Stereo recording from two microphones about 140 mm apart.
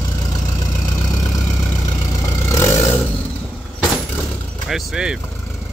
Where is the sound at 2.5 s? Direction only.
20° left (ahead or behind).